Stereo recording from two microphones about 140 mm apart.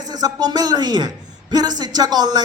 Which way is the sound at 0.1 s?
30° right (ahead or behind).